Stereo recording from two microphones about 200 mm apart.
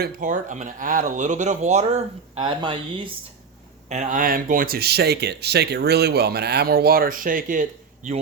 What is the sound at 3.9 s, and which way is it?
Speech, 40° right (ahead or behind).